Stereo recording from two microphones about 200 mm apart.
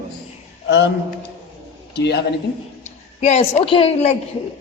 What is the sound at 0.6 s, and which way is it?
Speech, 60° left (ahead or behind).